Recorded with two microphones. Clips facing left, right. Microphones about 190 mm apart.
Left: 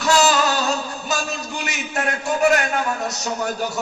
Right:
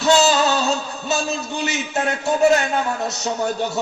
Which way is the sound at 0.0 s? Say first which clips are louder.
Right 2 dB; 25° right (ahead or behind).